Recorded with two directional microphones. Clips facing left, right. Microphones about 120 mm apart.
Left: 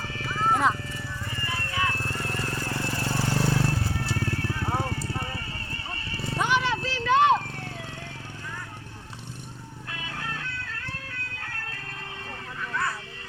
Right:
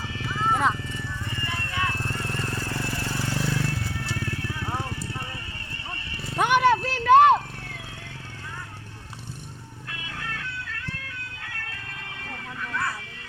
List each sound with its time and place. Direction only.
0.3 s horse: centre (ahead or behind)
1.5 s vehicle: 5° left (ahead or behind)
2.4 s vehicle: 25° right (ahead or behind)
2.6 s vehicle: 30° left (ahead or behind)
6.4 s a sound: 55° right (ahead or behind)
9.9 s music: 30° left (ahead or behind)